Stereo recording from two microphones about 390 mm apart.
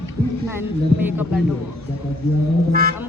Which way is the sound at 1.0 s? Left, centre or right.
Centre.